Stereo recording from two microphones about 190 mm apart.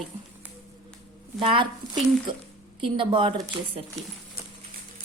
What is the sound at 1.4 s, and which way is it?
A woman's voice, 25° right (ahead or behind).